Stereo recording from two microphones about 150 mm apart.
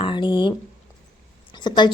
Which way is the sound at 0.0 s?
35° left (ahead or behind).